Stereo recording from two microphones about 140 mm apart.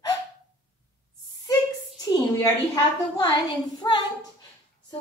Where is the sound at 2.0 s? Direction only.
25° left (ahead or behind).